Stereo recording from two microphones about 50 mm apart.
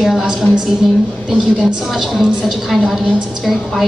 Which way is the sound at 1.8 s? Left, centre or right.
Centre.